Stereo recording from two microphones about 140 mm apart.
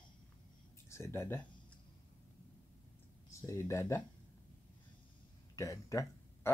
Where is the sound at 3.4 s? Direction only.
20° left (ahead or behind).